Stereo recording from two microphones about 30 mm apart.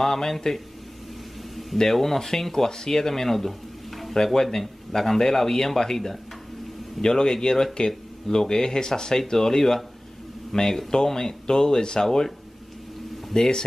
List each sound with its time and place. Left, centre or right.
0.0 s speech: centre
1.8 s speech: centre
4.1 s speech: centre
13.3 s speech: left